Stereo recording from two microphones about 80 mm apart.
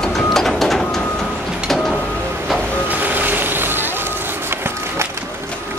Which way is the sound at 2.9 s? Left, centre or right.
Right.